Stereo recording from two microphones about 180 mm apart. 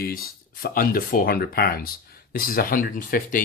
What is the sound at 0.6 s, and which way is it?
Speech, 55° left (ahead or behind).